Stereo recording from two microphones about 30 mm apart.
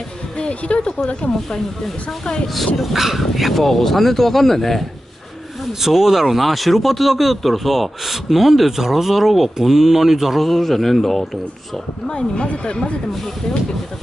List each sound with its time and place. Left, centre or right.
0.4 s speech: left
2.0 s speech: left
2.4 s speech: centre
2.8 s speech: centre
5.7 s speech: centre
10.4 s speech: centre
12.1 s speech: left